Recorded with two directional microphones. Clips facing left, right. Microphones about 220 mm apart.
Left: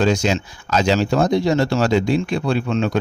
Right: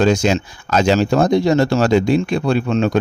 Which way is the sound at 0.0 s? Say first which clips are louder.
Right 3 dB; 50° right (ahead or behind).